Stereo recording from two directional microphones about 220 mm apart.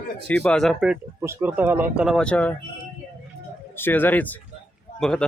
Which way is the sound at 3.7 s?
10° left (ahead or behind).